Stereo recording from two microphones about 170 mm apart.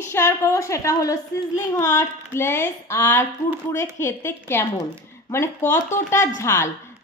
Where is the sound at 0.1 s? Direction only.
15° left (ahead or behind).